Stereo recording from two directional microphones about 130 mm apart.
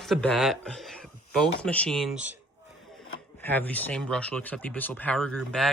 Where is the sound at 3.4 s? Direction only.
15° left (ahead or behind).